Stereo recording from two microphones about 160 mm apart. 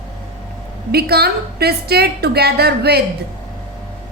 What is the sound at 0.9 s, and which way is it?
A woman's voice, 80° right.